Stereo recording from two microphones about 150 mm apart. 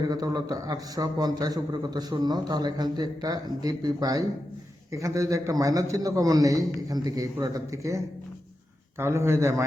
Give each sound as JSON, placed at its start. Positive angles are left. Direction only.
{"t": 0.1, "sound": "a man's voice", "side_deg": -25}